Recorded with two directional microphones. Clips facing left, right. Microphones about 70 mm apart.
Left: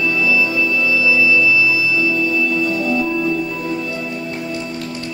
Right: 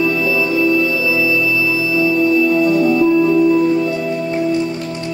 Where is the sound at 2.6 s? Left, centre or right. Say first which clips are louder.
Right 6 dB; right.